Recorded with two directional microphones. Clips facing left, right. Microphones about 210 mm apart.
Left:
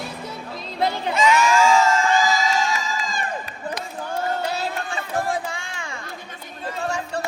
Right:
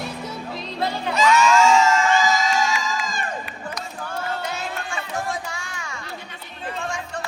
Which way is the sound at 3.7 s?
30° left (ahead or behind).